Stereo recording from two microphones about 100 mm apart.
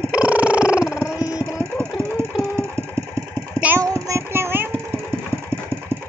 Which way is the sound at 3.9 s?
30° right (ahead or behind).